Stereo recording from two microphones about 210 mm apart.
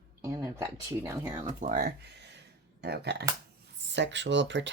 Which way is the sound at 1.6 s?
45° right (ahead or behind).